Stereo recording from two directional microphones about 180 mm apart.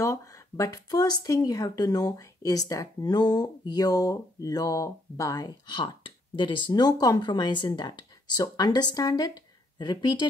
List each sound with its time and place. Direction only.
0.0 s speech: 20° left (ahead or behind)